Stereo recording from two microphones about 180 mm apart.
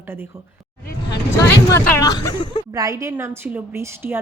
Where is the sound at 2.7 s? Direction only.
20° right (ahead or behind).